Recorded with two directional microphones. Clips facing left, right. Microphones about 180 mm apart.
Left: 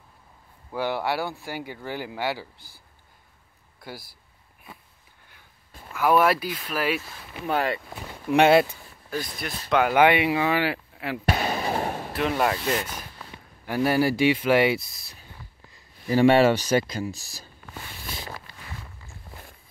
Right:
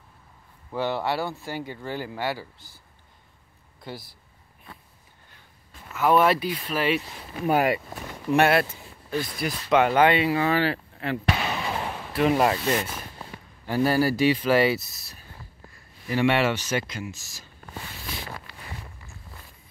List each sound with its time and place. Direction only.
0.7 s speech: 10° left (ahead or behind)
3.9 s speech: 10° left (ahead or behind)
5.9 s speech: 5° left (ahead or behind)
7.0 s speech: 15° right (ahead or behind)
7.9 s speech: 10° left (ahead or behind)
9.2 s speech: 5° right (ahead or behind)
9.8 s speech: 10° left (ahead or behind)
11.2 s a sound: 40° left (ahead or behind)
12.2 s speech: 5° right (ahead or behind)
13.7 s speech: 15° left (ahead or behind)
16.1 s speech: 35° left (ahead or behind)